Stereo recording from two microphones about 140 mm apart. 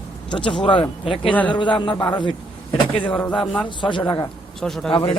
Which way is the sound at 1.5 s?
35° left (ahead or behind).